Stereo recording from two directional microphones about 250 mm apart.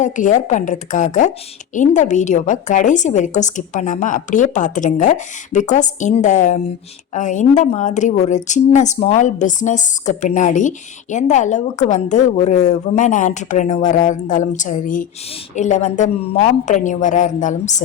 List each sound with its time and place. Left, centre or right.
0.0 s a woman's voice: left